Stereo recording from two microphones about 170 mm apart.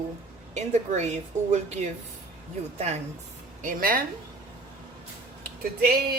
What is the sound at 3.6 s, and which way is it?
Speech, 55° right (ahead or behind).